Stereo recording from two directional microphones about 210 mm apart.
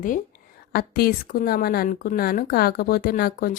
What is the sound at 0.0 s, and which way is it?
A woman's voice, 40° left (ahead or behind).